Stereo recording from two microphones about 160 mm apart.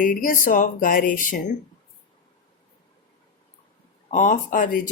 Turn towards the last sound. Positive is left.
turn(degrees=55)  # may be behind; listen again after turning